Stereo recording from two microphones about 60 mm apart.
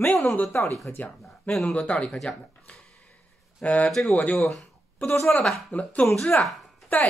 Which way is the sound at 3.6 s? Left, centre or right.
Left.